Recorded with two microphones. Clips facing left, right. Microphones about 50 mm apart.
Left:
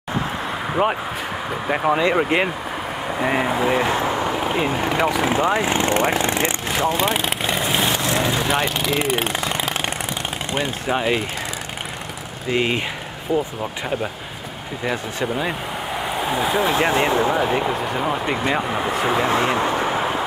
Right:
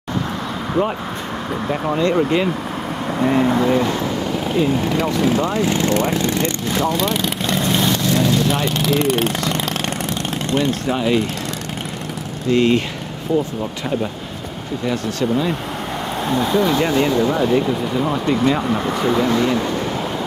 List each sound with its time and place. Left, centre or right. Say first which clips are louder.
0.8 s speech: even; centre
1.7 s speech: left 1 dB; left
3.3 s speech: right 4 dB; centre
8.0 s vehicle: right 3 dB; left
8.7 s speech: right 3 dB; centre
12.4 s speech: right 5 dB; centre
14.9 s speech: right 3 dB; left